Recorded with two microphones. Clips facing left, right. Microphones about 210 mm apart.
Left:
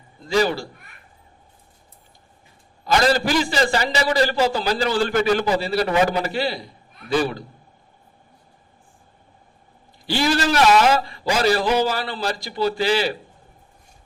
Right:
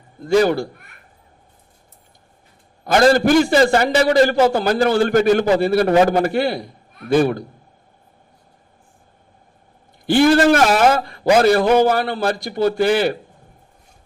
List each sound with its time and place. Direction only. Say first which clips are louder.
0.2 s a man's voice: right 5 dB; 55° right (ahead or behind)
2.8 s a man's voice: right 6 dB; 50° right (ahead or behind)
10.1 s a man's voice: right 8 dB; 55° right (ahead or behind)